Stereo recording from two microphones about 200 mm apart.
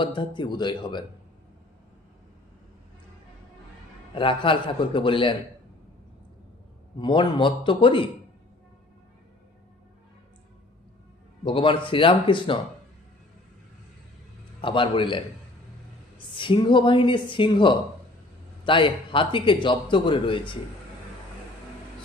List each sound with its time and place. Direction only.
0.0 s a man's voice: 25° left (ahead or behind)
4.1 s a man's voice: 25° left (ahead or behind)
7.0 s a man's voice: 25° left (ahead or behind)
11.4 s a man's voice: 25° left (ahead or behind)
14.6 s a man's voice: 25° left (ahead or behind)